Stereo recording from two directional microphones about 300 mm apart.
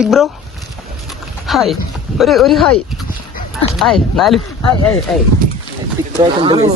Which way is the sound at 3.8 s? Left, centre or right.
Centre.